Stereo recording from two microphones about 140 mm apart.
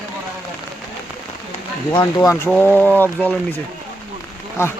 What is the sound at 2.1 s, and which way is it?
Speech, 20° left (ahead or behind).